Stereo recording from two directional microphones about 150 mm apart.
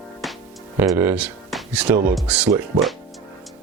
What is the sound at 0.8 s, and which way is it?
Speech, 15° right (ahead or behind).